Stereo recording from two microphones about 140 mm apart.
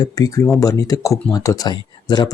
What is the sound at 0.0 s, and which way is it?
Speech, 25° left (ahead or behind).